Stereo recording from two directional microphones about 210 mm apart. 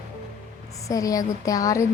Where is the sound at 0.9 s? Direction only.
15° left (ahead or behind).